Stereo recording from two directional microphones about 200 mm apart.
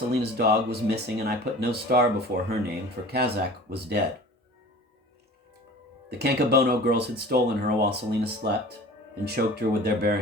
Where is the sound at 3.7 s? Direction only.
55° right (ahead or behind).